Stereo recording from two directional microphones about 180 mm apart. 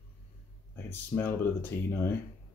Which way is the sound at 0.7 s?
10° left (ahead or behind).